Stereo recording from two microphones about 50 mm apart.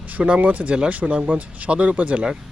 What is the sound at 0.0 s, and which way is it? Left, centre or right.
Speech, right.